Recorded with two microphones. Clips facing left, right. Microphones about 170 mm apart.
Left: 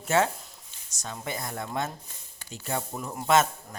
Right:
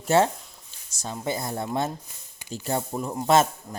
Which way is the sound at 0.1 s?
30° right (ahead or behind).